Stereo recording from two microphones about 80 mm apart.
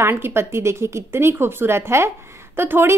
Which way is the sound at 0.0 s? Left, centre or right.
Right.